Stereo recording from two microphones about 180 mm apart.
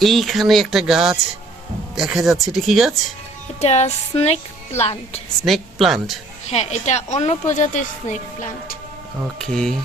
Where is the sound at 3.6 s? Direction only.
40° left (ahead or behind).